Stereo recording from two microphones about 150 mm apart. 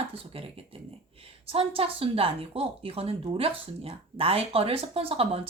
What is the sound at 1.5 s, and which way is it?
A woman's voice, 40° right (ahead or behind).